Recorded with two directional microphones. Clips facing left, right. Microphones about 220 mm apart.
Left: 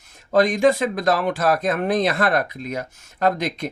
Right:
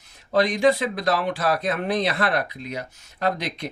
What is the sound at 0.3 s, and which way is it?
Speech, 50° left (ahead or behind).